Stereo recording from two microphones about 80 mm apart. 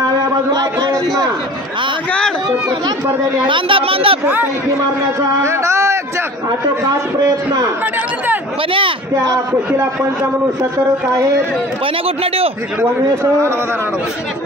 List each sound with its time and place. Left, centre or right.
0.5 s a sound: right
3.4 s speech: right
5.4 s speech: right
8.7 s speech: right